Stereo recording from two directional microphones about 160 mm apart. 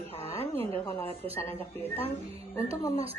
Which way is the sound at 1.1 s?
35° right (ahead or behind).